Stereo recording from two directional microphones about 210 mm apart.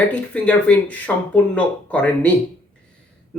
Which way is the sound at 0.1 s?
5° left (ahead or behind).